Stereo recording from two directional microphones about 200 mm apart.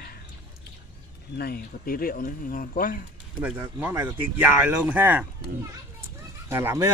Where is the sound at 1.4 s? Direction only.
50° left (ahead or behind).